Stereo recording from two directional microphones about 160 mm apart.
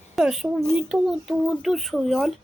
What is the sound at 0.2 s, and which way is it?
A child's voice, 5° right (ahead or behind).